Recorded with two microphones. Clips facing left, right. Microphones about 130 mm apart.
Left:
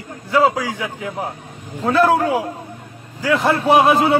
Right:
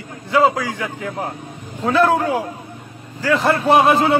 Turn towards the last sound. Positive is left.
turn(degrees=5)  # may be behind; listen again after turning